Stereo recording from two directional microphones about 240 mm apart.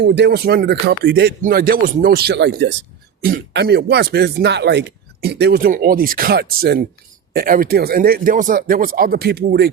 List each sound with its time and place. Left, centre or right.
0.0 s speech: right